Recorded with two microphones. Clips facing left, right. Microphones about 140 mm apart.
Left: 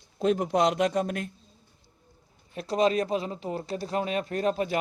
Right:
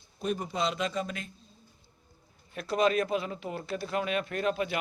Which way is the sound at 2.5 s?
30° left (ahead or behind).